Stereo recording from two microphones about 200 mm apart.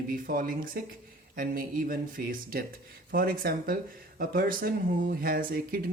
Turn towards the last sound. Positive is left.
turn(degrees=-45)  # may be behind; listen again after turning